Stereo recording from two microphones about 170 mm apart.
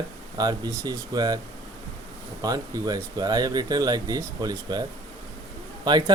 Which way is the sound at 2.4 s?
20° right (ahead or behind).